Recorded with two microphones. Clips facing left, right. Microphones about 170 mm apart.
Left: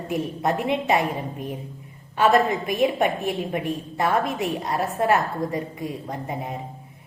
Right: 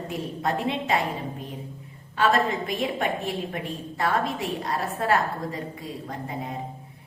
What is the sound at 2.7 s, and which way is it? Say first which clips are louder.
A woman's voice: left 5 dB; 20° left (ahead or behind).